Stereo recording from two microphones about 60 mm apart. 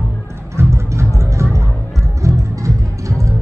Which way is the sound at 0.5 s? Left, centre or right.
Right.